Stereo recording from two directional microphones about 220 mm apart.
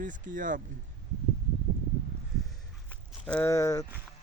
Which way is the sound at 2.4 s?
Centre (ahead or behind).